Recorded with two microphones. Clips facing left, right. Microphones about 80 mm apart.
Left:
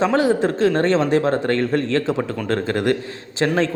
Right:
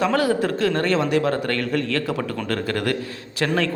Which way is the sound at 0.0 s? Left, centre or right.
Left.